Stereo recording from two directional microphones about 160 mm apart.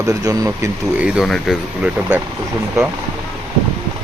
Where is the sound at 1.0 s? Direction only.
5° right (ahead or behind).